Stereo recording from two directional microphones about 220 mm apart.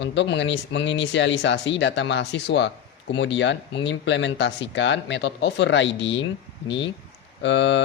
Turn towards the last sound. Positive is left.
turn(degrees=55)  # may be behind; listen again after turning